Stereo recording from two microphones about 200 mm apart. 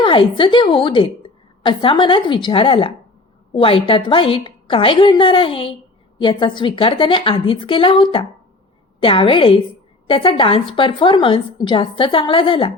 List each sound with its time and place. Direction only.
0.0 s a woman's voice: 25° left (ahead or behind)